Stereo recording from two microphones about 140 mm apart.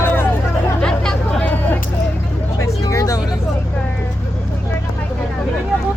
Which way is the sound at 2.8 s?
25° left (ahead or behind).